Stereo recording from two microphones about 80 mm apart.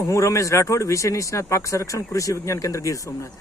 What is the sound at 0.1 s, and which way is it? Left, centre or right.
Speech, left.